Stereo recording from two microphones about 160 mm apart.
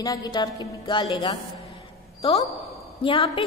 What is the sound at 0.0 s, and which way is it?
A woman's voice, 25° left (ahead or behind).